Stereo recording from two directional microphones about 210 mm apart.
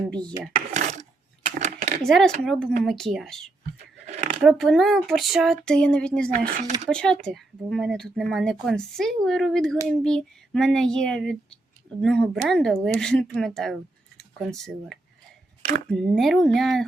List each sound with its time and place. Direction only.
0.1 s speech: 5° left (ahead or behind)
0.8 s filing: 35° right (ahead or behind)
1.5 s coin: 35° right (ahead or behind)
2.0 s speech: centre (ahead or behind)
4.0 s a sound: 35° right (ahead or behind)
4.4 s speech: centre (ahead or behind)